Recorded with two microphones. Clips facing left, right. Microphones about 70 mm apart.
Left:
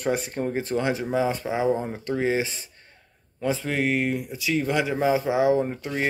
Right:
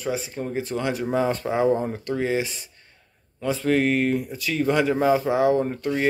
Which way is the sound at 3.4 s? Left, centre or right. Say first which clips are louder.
Even; centre.